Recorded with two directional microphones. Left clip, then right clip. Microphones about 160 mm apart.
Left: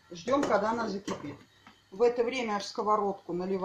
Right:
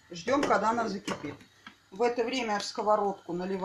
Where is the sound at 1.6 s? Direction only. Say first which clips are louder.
Left 2 dB; 55° right (ahead or behind).